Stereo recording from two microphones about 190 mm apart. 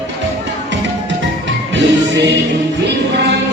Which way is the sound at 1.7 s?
65° right (ahead or behind).